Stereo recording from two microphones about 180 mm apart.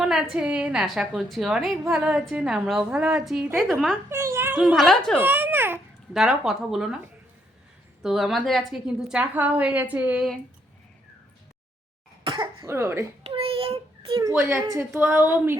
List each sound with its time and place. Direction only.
0.0 s a woman's voice: centre (ahead or behind)
4.1 s a woman's voice: 15° right (ahead or behind); by 5.1 s centre (ahead or behind)
5.1 s a child's voice: 10° right (ahead or behind)
8.0 s a woman's voice: centre (ahead or behind)
12.2 s cough: 30° right (ahead or behind)
12.6 s a woman's voice: 15° right (ahead or behind)
13.2 s child singing: 30° right (ahead or behind)
14.2 s a woman's voice: 15° right (ahead or behind)